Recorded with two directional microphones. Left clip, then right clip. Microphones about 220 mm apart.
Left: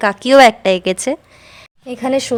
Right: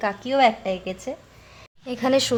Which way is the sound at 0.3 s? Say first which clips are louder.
Left 12 dB; 45° left (ahead or behind).